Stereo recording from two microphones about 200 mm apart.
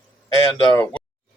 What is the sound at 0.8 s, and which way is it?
Speech, 5° left (ahead or behind).